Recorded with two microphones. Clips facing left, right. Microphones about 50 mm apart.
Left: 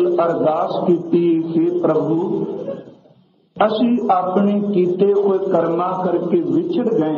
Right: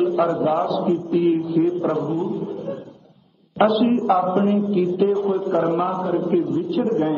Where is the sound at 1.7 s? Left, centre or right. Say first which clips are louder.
Left 6 dB; centre.